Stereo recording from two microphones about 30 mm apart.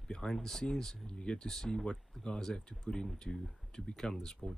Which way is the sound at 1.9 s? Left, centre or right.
Left.